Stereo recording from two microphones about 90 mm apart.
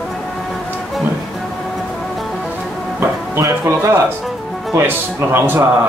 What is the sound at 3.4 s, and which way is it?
Music, 35° right (ahead or behind).